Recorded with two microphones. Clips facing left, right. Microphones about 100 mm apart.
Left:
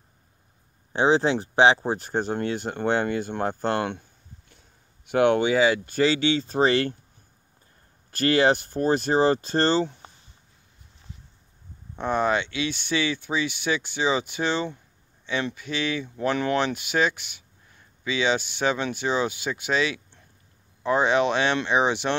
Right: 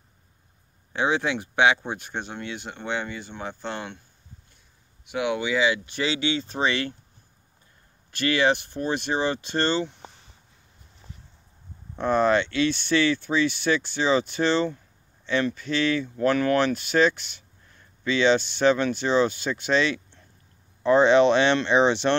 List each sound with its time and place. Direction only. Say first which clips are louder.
0.9 s speech: left 4 dB; 30° left (ahead or behind); by 4.0 s 55° left (ahead or behind)
5.0 s speech: left 7 dB; 55° left (ahead or behind)
8.1 s speech: left 2 dB; 40° left (ahead or behind)
12.0 s speech: right 3 dB; 15° left (ahead or behind)